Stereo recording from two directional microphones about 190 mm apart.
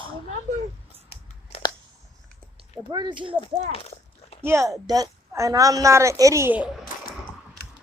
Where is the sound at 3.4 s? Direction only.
30° left (ahead or behind).